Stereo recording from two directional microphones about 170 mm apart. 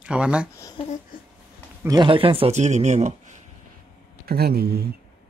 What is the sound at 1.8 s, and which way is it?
Speech, 25° right (ahead or behind).